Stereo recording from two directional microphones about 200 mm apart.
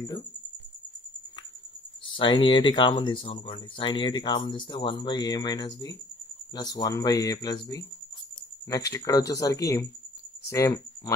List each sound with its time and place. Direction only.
2.1 s speech: 25° left (ahead or behind)